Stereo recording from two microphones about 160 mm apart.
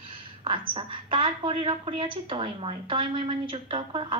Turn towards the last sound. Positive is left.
turn(degrees=-30)  # may be behind; listen again after turning